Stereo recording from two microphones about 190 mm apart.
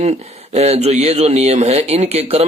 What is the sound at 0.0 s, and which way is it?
Speech, 35° right (ahead or behind).